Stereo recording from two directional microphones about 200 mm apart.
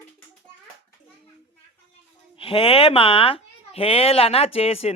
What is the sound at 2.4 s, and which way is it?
Speech, 25° left (ahead or behind).